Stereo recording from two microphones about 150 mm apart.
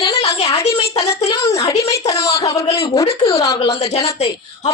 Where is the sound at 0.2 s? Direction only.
40° left (ahead or behind).